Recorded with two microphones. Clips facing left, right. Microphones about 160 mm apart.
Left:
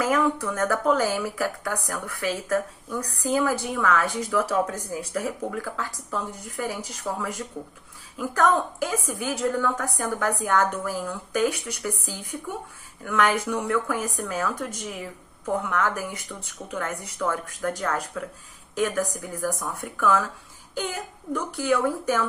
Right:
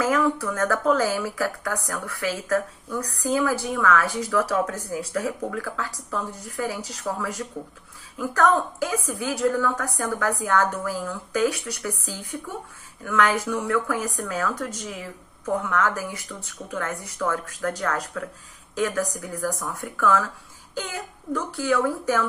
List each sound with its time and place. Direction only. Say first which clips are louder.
0.0 s speech: right 1 dB; 20° left (ahead or behind)
21.3 s speech: right 1 dB; 20° left (ahead or behind)